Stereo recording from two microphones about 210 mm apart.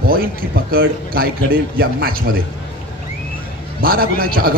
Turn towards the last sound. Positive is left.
turn(degrees=-45)  # may be behind; listen again after turning